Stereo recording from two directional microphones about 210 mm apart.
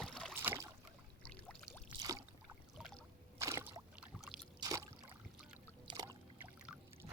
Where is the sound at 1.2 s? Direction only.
5° left (ahead or behind).